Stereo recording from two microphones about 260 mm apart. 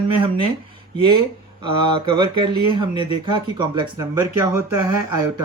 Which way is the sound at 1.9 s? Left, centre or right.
Centre.